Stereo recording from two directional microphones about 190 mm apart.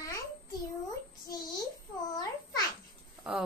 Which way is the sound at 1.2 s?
20° left (ahead or behind).